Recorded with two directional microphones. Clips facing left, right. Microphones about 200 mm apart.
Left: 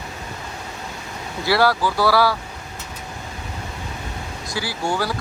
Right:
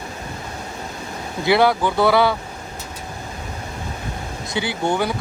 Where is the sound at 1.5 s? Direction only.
20° right (ahead or behind).